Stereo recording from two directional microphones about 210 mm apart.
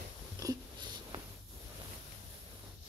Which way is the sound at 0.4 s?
15° right (ahead or behind).